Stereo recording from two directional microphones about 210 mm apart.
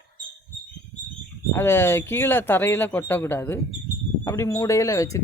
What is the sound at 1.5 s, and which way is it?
Speech, 10° left (ahead or behind).